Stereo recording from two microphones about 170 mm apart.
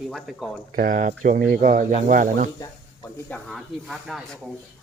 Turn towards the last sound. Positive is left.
turn(degrees=0)  # may be behind; listen again after turning